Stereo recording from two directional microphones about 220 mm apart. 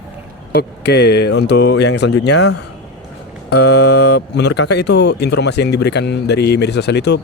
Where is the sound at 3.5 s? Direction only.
90° left.